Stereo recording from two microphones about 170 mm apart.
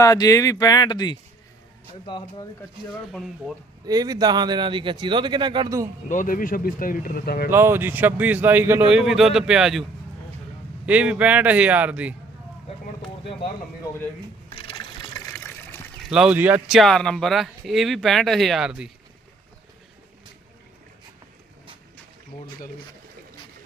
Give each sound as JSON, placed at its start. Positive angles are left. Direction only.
{"t": 0.0, "sound": "speech", "side_deg": 20}
{"t": 3.1, "sound": "speech", "side_deg": 0}
{"t": 3.8, "sound": "speech", "side_deg": -20}
{"t": 6.1, "sound": "speech", "side_deg": 50}
{"t": 7.5, "sound": "speech", "side_deg": -15}
{"t": 10.8, "sound": "speech", "side_deg": -10}
{"t": 14.5, "sound": "a sound", "side_deg": 35}
{"t": 15.3, "sound": "water", "side_deg": 15}
{"t": 16.0, "sound": "speech", "side_deg": -5}